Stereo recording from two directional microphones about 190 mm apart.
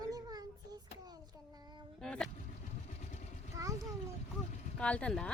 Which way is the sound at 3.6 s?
15° right (ahead or behind).